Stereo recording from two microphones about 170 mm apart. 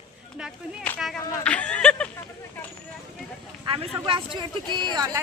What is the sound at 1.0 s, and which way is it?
Speech, 5° left (ahead or behind).